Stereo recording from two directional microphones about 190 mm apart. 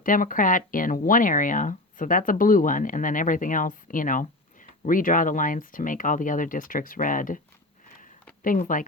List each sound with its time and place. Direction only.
0.0 s speech: 45° left (ahead or behind)
8.4 s speech: 45° left (ahead or behind)